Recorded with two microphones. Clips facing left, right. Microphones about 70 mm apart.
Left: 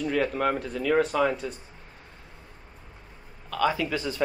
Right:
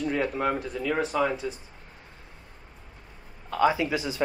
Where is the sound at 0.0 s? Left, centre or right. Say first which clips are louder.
Left 1 dB; centre.